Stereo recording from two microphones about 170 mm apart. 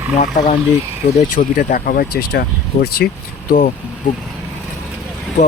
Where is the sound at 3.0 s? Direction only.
75° left (ahead or behind).